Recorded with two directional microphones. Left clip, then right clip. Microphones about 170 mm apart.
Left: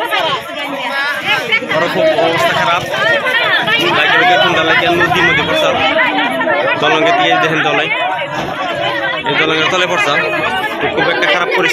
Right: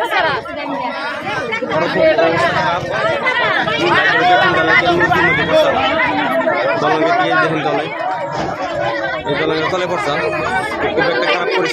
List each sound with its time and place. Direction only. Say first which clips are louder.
1.8 s speech: right 2 dB; centre (ahead or behind)
3.9 s speech: even; centre (ahead or behind)
6.9 s speech: left 4 dB; 35° left (ahead or behind)
7.5 s speech: left 4 dB; 20° left (ahead or behind)
9.5 s speech: left 4 dB; 5° right (ahead or behind)